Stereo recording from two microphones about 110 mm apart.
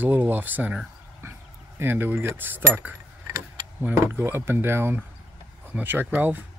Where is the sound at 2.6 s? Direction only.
25° right (ahead or behind).